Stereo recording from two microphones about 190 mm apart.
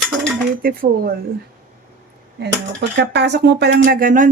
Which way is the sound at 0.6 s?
50° right (ahead or behind).